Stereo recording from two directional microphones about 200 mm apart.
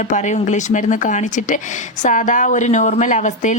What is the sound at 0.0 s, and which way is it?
Speech, 35° left (ahead or behind).